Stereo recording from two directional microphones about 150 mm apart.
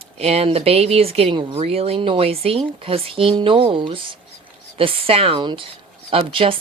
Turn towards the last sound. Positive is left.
turn(degrees=-35)  # may be behind; listen again after turning